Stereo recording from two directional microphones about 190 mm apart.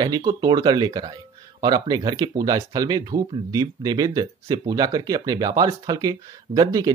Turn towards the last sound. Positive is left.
turn(degrees=-20)  # may be behind; listen again after turning